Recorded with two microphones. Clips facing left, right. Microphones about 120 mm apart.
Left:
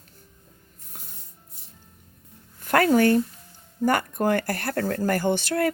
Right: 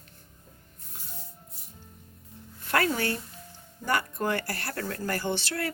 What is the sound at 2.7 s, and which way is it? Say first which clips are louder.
Speech: left 9 dB; 50° left (ahead or behind).